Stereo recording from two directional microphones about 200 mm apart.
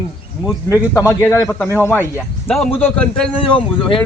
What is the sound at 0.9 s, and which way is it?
Speech, 15° left (ahead or behind).